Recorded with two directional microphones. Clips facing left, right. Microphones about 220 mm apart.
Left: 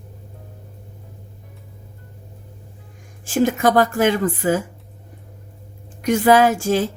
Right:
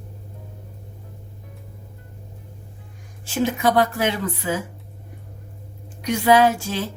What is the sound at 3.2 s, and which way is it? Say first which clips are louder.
Speech: left 4 dB; 50° left (ahead or behind).